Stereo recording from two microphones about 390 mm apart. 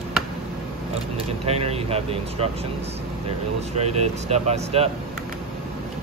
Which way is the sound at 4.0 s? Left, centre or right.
Centre.